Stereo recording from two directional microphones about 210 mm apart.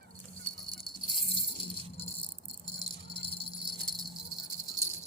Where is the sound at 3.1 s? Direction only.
25° left (ahead or behind).